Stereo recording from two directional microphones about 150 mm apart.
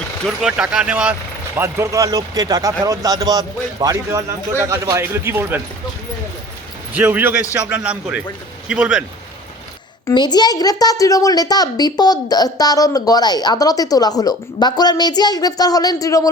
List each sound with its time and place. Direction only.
0.3 s speech: 5° right (ahead or behind)
6.9 s speech: 10° right (ahead or behind)
10.1 s a child's voice: 25° left (ahead or behind)